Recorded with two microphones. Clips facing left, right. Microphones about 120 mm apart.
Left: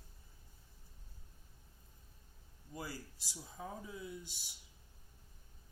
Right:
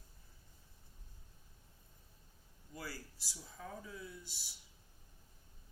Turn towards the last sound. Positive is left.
turn(degrees=20)  # may be behind; listen again after turning